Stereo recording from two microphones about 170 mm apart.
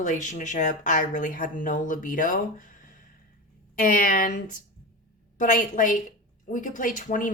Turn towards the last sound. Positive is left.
turn(degrees=50)  # may be behind; listen again after turning